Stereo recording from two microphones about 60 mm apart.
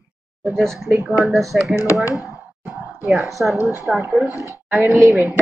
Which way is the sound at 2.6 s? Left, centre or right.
Right.